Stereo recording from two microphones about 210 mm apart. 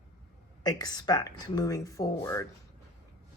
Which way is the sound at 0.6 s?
20° left (ahead or behind).